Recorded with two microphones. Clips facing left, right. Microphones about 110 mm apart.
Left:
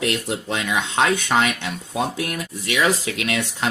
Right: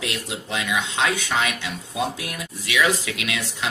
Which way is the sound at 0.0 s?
45° left (ahead or behind).